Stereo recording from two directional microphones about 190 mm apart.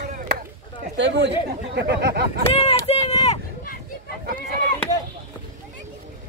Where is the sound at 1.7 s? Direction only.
60° right (ahead or behind).